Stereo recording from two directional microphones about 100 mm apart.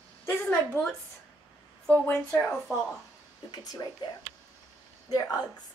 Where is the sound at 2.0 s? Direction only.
15° left (ahead or behind).